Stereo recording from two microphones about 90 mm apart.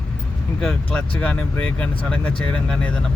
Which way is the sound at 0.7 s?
15° left (ahead or behind).